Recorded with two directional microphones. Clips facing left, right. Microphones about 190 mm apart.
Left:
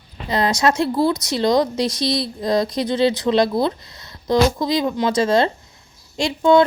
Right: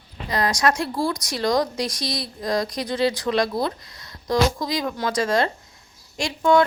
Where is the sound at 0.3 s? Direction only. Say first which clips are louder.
Left 3 dB; 25° left (ahead or behind).